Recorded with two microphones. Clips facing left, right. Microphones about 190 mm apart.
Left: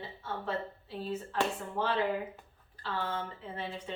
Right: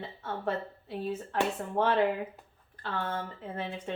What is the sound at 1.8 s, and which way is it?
Speech, 55° right (ahead or behind).